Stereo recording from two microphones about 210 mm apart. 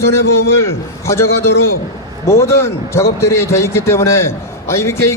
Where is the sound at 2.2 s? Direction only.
15° left (ahead or behind).